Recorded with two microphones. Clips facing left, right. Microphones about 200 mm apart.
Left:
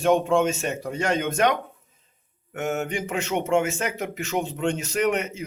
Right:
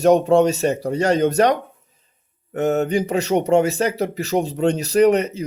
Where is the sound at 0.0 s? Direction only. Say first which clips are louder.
Right 6 dB; 40° right (ahead or behind).